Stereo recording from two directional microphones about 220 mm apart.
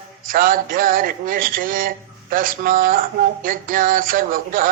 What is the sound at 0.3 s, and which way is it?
Mantra, 40° right (ahead or behind).